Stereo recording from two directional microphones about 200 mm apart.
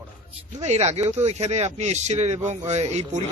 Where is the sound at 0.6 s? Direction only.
35° right (ahead or behind).